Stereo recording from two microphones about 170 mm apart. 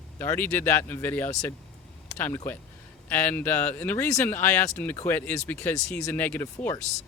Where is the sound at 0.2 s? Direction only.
10° left (ahead or behind).